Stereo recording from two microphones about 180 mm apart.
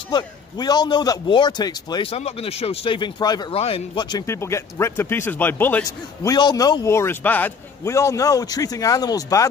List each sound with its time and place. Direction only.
0.1 s a man's voice: 20° left (ahead or behind)
5.9 s a man's voice: 20° left (ahead or behind)